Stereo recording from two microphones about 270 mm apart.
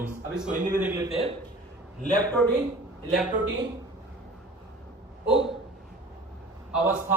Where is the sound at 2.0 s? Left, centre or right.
Left.